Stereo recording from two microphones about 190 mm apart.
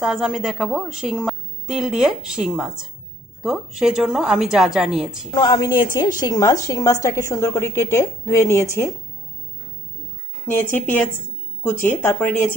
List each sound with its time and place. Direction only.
0.0 s a woman's voice: centre (ahead or behind)
5.3 s a woman's voice: 20° left (ahead or behind)
10.4 s a woman's voice: 10° left (ahead or behind)